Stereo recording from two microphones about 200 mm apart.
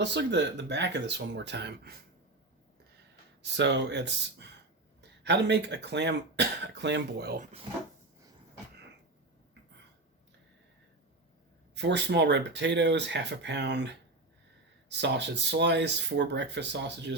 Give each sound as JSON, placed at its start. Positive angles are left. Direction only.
{"t": 0.0, "sound": "speech", "side_deg": -60}
{"t": 3.4, "sound": "speech", "side_deg": -60}
{"t": 11.7, "sound": "speech", "side_deg": -60}